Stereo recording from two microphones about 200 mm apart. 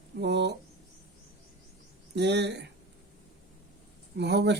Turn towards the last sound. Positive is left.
turn(degrees=-55)  # may be behind; listen again after turning